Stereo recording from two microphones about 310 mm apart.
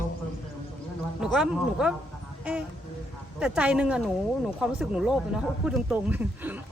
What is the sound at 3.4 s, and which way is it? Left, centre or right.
A woman's voice, centre.